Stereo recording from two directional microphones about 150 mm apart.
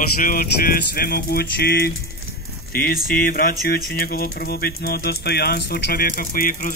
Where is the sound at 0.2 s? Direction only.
70° left (ahead or behind); by 1.9 s 90° left.